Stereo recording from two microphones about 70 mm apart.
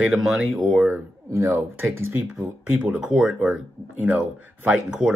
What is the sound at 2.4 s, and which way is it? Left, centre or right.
Speech, right.